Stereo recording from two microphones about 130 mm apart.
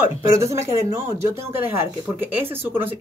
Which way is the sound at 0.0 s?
25° right (ahead or behind).